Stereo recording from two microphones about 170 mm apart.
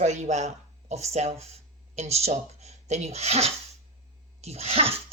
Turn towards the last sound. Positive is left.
turn(degrees=-35)  # may be behind; listen again after turning